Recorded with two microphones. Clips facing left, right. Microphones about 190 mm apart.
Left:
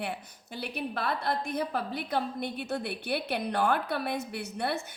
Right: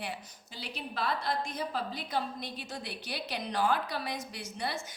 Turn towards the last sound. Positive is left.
turn(degrees=60)  # may be behind; listen again after turning